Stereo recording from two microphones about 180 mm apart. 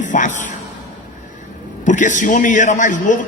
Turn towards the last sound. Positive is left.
turn(degrees=45)  # may be behind; listen again after turning